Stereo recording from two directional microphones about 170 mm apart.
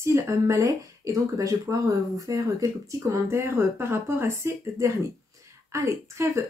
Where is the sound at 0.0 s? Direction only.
15° right (ahead or behind).